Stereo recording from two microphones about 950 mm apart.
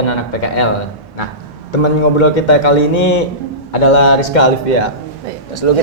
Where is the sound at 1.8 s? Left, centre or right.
Left.